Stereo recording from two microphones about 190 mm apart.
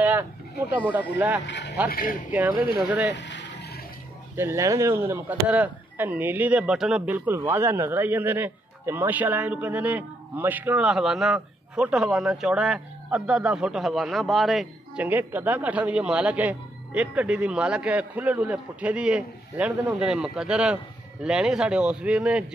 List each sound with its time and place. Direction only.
0.0 s a sound: 10° right (ahead or behind)
0.7 s speech: 10° right (ahead or behind)
1.4 s speech: 65° left (ahead or behind)
1.9 s speech: 50° left (ahead or behind)
2.6 s speech: 10° right (ahead or behind)
3.1 s vehicle: 70° left (ahead or behind)
4.4 s speech: 15° right (ahead or behind)